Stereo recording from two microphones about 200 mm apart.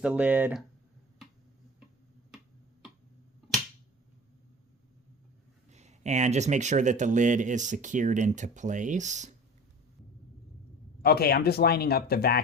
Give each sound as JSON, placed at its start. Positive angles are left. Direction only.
{"t": 0.0, "sound": "speech", "side_deg": -5}
{"t": 5.7, "sound": "speech", "side_deg": -35}
{"t": 11.0, "sound": "speech", "side_deg": 50}